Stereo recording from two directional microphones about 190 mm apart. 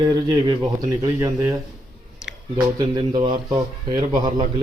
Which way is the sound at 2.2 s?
5° right (ahead or behind).